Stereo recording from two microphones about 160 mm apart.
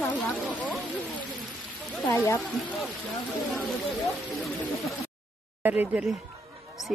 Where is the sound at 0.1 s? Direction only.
10° left (ahead or behind).